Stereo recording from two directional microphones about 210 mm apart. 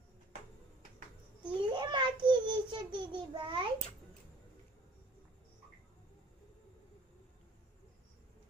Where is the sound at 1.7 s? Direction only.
20° right (ahead or behind).